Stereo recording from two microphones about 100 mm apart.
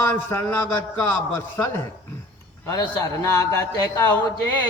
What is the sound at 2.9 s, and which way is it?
Speech, 30° left (ahead or behind).